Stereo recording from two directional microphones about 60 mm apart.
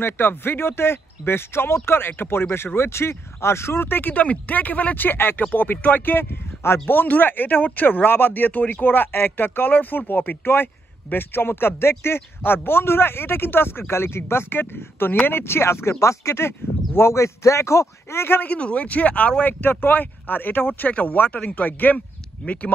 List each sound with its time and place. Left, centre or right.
0.0 s speech: left
18.4 s speech: left
19.4 s speech: left